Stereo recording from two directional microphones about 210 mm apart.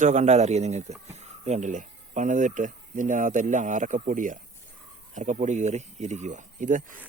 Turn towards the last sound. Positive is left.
turn(degrees=-35)  # may be behind; listen again after turning